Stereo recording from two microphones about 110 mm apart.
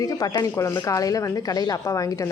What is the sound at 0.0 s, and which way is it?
Speech, 35° left (ahead or behind).